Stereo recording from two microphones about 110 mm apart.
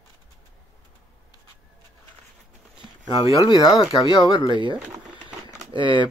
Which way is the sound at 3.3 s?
40° left (ahead or behind).